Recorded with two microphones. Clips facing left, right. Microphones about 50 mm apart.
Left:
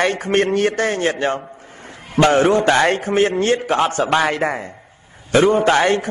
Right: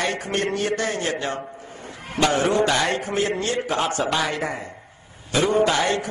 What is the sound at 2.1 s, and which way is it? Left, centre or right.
A man's voice, left.